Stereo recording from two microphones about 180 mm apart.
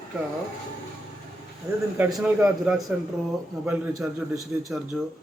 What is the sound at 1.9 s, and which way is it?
A man's voice, 5° right (ahead or behind).